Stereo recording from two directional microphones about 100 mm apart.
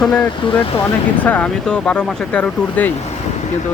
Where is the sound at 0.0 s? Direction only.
10° left (ahead or behind).